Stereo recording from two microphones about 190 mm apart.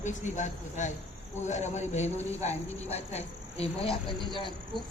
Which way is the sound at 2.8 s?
35° left (ahead or behind).